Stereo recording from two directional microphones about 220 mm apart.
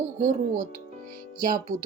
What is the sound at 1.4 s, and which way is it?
Speech, 40° right (ahead or behind).